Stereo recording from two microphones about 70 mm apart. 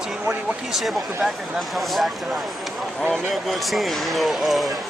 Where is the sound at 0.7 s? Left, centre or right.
Centre.